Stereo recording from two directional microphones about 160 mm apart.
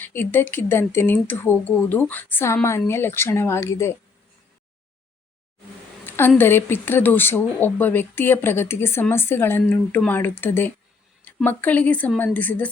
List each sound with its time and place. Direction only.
0.0 s speech: 15° left (ahead or behind)
6.1 s speech: 10° left (ahead or behind)